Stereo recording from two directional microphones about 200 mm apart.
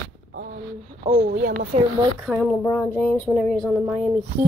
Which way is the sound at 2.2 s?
Centre (ahead or behind).